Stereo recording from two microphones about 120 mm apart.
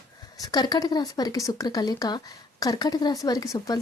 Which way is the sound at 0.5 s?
35° left (ahead or behind).